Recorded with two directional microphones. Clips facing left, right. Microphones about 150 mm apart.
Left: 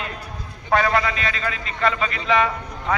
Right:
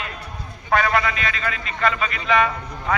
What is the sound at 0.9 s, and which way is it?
A man's voice, 25° left (ahead or behind).